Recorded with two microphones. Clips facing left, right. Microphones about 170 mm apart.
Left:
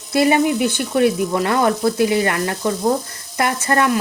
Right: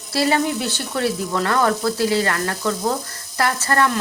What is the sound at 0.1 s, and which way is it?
Frying, 15° left (ahead or behind).